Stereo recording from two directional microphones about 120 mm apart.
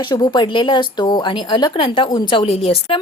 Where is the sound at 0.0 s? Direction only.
40° left (ahead or behind).